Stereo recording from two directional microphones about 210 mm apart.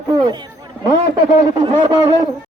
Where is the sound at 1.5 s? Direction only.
20° right (ahead or behind).